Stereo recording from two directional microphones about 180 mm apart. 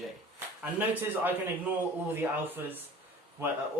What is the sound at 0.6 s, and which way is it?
Speech, 10° right (ahead or behind).